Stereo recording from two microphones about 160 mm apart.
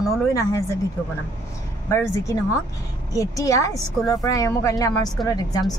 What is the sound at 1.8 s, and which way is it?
A woman's voice, 20° left (ahead or behind).